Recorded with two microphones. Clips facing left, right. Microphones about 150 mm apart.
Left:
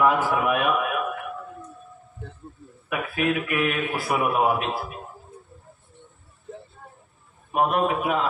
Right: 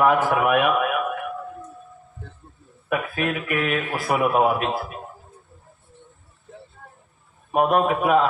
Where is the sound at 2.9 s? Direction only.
40° right (ahead or behind).